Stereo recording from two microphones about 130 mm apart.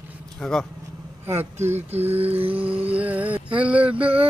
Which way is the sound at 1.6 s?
15° right (ahead or behind).